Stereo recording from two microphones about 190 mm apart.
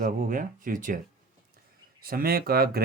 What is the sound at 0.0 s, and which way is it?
Speech, 45° right (ahead or behind).